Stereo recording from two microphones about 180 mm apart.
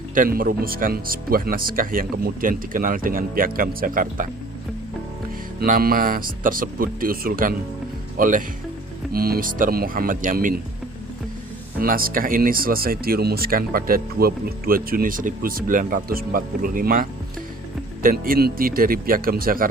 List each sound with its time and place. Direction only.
0.1 s speech: 50° right (ahead or behind)
5.5 s speech: 55° right (ahead or behind)
11.8 s speech: 55° right (ahead or behind)